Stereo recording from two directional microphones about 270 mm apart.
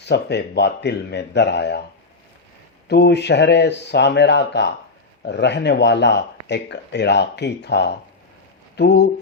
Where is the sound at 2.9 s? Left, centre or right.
Left.